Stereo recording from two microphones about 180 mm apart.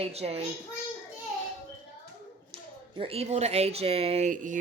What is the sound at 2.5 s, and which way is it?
A woman's voice, 30° right (ahead or behind).